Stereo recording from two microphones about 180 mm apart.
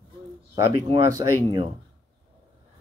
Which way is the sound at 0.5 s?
20° right (ahead or behind).